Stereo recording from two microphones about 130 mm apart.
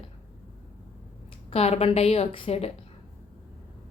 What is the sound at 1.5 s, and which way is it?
A woman's voice, 50° left (ahead or behind).